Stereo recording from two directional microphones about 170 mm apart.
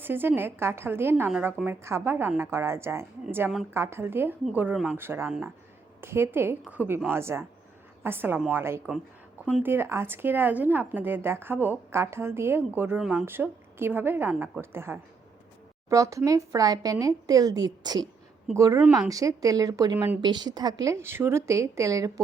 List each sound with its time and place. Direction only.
0.0 s speech: 10° right (ahead or behind)